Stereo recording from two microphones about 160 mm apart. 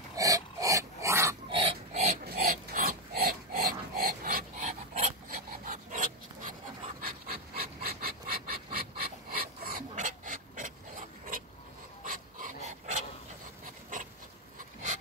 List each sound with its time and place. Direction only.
0.1 s dog: 20° right (ahead or behind)
1.5 s pig: 35° right (ahead or behind)
2.3 s pig: 50° right (ahead or behind)
7.0 s a sound: 65° right (ahead or behind)
12.0 s filing: 55° right (ahead or behind)
14.6 s a sound: 55° right (ahead or behind)